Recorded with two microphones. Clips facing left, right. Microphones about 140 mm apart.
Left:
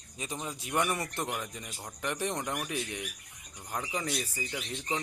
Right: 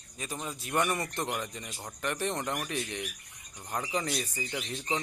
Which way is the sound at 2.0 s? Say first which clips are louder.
Right 1 dB; 15° left (ahead or behind).